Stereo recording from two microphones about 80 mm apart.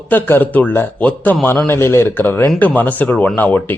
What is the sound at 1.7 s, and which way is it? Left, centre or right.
A man's voice, left.